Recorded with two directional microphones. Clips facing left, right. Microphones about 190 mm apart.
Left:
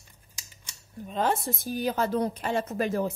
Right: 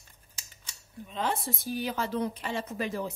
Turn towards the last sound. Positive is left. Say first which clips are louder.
# left 5 dB
turn(degrees=45)  # may be behind; listen again after turning